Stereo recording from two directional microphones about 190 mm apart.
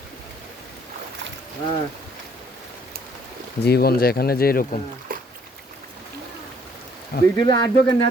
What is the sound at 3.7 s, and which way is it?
Speech, 55° left (ahead or behind).